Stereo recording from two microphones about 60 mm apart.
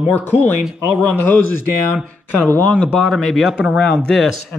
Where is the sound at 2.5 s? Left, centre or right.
Left.